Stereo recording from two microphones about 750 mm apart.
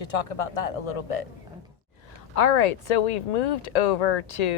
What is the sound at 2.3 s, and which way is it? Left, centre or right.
A woman's voice, left.